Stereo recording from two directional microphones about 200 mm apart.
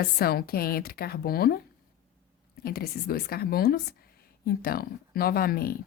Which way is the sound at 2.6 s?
50° left (ahead or behind).